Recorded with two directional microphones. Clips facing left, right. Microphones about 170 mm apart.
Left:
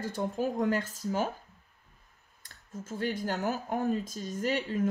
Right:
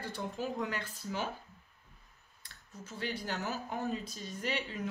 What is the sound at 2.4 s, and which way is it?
Speech, 45° left (ahead or behind).